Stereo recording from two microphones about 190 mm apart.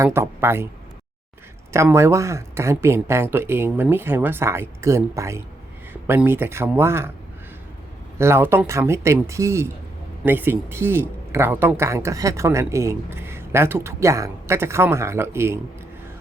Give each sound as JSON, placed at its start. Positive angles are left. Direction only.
{"t": 0.0, "sound": "a man's voice", "side_deg": -15}
{"t": 1.7, "sound": "a man's voice", "side_deg": -15}
{"t": 8.2, "sound": "a man's voice", "side_deg": -15}